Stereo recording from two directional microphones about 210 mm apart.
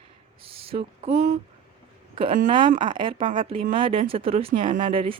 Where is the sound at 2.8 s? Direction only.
25° right (ahead or behind).